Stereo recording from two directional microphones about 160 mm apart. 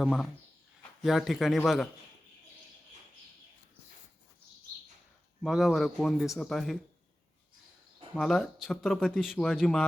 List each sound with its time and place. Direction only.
0.0 s speech: centre (ahead or behind)
5.4 s speech: centre (ahead or behind)
8.1 s speech: centre (ahead or behind)